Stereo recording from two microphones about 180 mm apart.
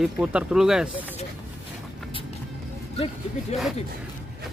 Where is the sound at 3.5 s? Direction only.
40° left (ahead or behind).